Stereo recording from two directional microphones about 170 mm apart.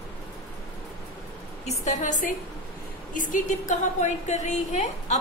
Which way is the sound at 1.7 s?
45° left (ahead or behind).